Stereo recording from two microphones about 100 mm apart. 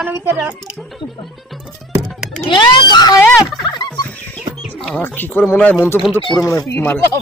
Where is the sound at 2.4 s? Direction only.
55° left (ahead or behind).